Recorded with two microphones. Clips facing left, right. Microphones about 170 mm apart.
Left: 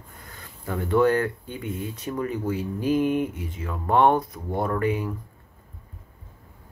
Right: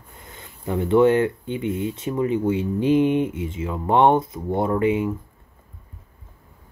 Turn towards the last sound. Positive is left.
turn(degrees=-20)  # may be behind; listen again after turning